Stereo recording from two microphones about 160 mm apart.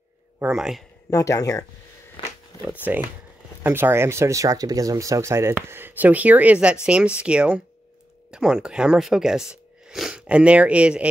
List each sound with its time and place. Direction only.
0.4 s speech: 5° right (ahead or behind)
1.1 s speech: 20° left (ahead or behind)
2.2 s a sound: 30° left (ahead or behind)
2.8 s speech: 10° right (ahead or behind)